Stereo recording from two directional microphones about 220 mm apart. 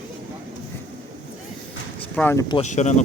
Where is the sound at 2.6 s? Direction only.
35° left (ahead or behind).